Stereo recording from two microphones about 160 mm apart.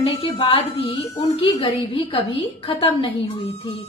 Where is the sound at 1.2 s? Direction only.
25° left (ahead or behind).